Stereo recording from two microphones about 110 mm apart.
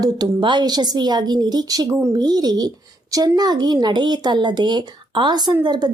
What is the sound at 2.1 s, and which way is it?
A woman's voice, 40° right (ahead or behind).